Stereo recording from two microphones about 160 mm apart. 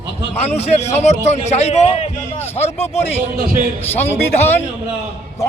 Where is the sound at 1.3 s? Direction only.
45° left (ahead or behind).